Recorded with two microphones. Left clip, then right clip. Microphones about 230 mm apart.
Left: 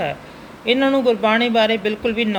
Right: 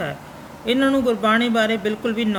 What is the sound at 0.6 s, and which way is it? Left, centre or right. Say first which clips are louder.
Speech: left 3 dB; centre.